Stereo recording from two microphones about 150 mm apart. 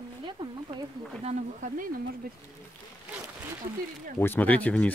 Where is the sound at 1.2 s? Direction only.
55° right (ahead or behind).